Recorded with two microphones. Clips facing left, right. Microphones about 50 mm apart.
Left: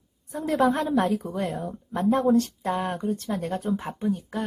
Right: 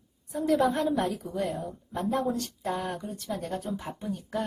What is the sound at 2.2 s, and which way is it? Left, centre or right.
Speech, left.